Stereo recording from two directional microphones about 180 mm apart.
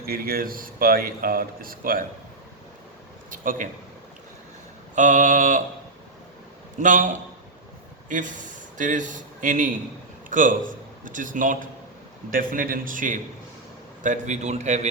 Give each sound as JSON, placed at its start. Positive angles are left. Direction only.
{"t": 0.0, "sound": "speech", "side_deg": -55}
{"t": 3.2, "sound": "a sound", "side_deg": -50}
{"t": 4.9, "sound": "speech", "side_deg": -45}
{"t": 6.7, "sound": "speech", "side_deg": -45}
{"t": 8.1, "sound": "a man's voice", "side_deg": -45}